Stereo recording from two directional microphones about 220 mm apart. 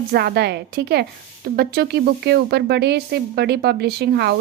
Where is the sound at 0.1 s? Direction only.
45° right (ahead or behind).